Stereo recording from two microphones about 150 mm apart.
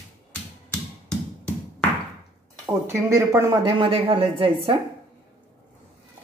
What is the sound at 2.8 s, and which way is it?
Speech, 20° right (ahead or behind).